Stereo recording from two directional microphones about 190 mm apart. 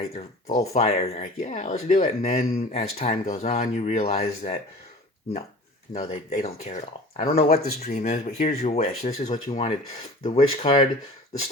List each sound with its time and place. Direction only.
0.7 s speech: 35° left (ahead or behind)
5.9 s speech: 35° left (ahead or behind)